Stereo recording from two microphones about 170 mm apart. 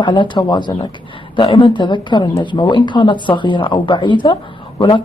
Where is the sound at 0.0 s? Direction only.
30° left (ahead or behind).